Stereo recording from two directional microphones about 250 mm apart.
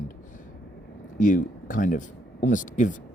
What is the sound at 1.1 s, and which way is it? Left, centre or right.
Speech, left.